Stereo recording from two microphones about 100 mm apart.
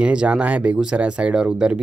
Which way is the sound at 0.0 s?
10° right (ahead or behind).